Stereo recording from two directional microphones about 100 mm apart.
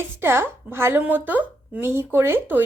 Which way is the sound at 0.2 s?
25° right (ahead or behind).